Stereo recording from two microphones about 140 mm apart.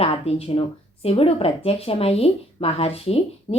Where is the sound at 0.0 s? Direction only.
45° left (ahead or behind).